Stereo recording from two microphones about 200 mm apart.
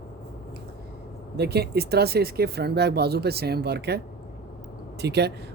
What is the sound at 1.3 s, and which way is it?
Speech, 55° right (ahead or behind).